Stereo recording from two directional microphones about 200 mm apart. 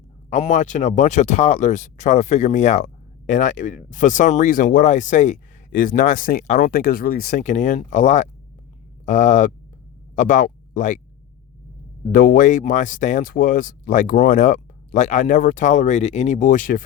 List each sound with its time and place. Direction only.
0.3 s speech: 35° left (ahead or behind)
12.1 s speech: 45° left (ahead or behind)